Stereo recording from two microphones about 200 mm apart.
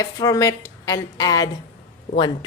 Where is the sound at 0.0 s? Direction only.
15° left (ahead or behind).